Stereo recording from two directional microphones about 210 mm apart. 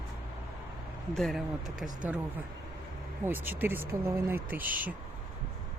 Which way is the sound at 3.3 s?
10° right (ahead or behind).